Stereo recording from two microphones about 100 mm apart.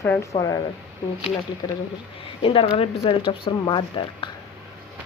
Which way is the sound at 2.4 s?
70° left (ahead or behind).